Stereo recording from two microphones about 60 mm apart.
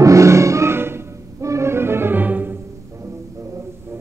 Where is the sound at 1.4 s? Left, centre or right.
Right.